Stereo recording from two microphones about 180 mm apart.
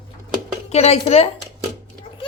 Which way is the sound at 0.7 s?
35° left (ahead or behind).